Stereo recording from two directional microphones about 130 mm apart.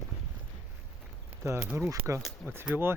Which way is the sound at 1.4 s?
20° right (ahead or behind).